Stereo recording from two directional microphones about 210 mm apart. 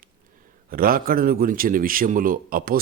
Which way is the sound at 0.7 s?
45° right (ahead or behind).